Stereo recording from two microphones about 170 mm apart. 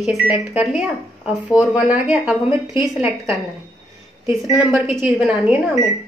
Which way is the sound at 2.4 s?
20° right (ahead or behind).